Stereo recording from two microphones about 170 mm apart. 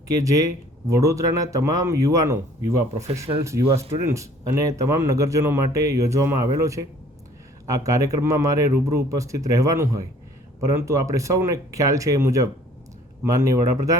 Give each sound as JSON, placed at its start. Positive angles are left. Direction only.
{"t": 0.1, "sound": "a man's voice", "side_deg": -20}